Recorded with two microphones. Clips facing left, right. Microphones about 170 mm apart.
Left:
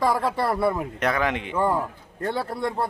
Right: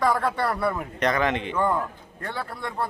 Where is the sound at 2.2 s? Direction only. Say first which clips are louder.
Left 6 dB; 25° left (ahead or behind).